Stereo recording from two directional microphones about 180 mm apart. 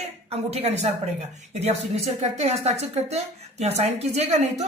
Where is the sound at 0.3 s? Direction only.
35° right (ahead or behind).